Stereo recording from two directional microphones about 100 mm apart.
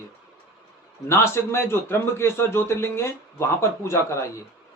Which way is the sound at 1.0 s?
25° left (ahead or behind).